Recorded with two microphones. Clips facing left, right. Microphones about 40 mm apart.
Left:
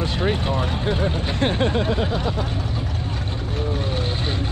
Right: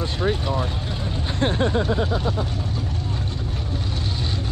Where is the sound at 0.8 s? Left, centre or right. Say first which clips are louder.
Left 6 dB; left.